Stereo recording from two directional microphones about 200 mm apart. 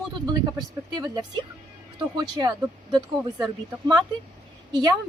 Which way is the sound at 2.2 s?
20° right (ahead or behind).